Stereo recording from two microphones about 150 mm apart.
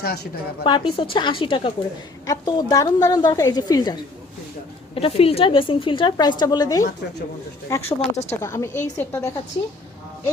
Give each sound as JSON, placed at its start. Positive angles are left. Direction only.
{"t": 0.0, "sound": "a woman's voice", "side_deg": 90}
{"t": 0.6, "sound": "a woman's voice", "side_deg": 35}
{"t": 2.2, "sound": "a woman's voice", "side_deg": 25}
{"t": 4.9, "sound": "a woman's voice", "side_deg": 40}
{"t": 8.1, "sound": "speech", "side_deg": 45}
{"t": 8.4, "sound": "a woman's voice", "side_deg": 20}